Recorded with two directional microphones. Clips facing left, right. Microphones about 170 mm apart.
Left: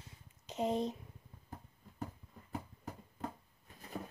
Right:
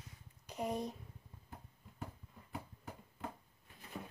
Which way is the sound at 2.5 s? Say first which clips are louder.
Left 3 dB; 40° left (ahead or behind).